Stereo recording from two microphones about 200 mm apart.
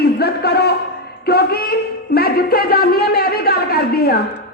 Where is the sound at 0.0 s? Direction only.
55° left (ahead or behind).